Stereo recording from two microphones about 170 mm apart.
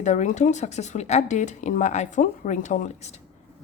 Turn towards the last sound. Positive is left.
turn(degrees=40)  # may be behind; listen again after turning